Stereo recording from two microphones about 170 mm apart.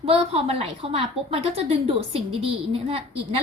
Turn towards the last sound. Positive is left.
turn(degrees=-35)  # may be behind; listen again after turning